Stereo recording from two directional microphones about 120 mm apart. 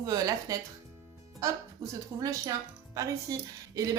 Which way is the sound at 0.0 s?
30° right (ahead or behind).